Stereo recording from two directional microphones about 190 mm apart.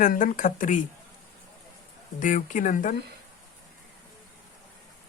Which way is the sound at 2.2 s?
40° left (ahead or behind).